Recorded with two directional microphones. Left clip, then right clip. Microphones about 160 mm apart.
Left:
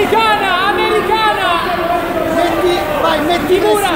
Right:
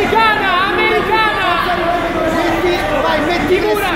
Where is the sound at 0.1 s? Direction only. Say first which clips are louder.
Even; 70° left (ahead or behind).